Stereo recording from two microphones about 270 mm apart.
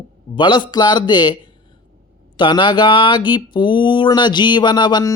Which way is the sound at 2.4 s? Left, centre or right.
Centre.